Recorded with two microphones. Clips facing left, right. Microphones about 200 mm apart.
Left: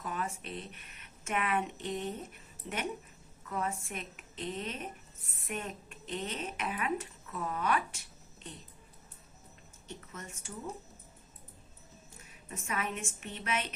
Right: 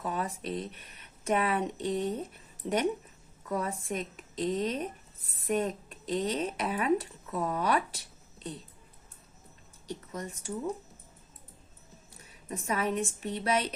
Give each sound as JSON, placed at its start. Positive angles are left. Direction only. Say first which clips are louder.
{"t": 0.0, "sound": "a woman's voice", "louder": "right 4 dB", "side_deg": -35}
{"t": 9.8, "sound": "a woman's voice", "louder": "right 8 dB", "side_deg": -35}
{"t": 12.1, "sound": "a woman's voice", "louder": "right 7 dB", "side_deg": -35}